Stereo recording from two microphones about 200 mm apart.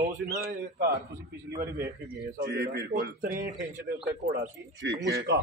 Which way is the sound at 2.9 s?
40° right (ahead or behind).